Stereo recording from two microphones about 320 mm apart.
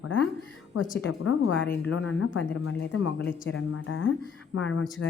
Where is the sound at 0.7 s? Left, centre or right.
Left.